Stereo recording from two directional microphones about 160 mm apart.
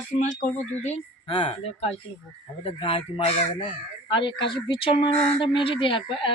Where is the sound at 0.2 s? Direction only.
50° left (ahead or behind).